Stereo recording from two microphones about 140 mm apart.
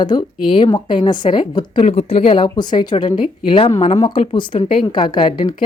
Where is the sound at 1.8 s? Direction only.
45° left (ahead or behind).